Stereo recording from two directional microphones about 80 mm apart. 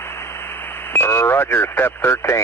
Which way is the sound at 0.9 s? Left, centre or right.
Left.